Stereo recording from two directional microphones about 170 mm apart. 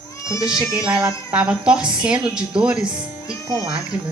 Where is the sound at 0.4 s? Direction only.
5° right (ahead or behind).